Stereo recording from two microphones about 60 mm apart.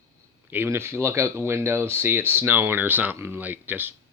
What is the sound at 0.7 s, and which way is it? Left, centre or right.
Speech, right.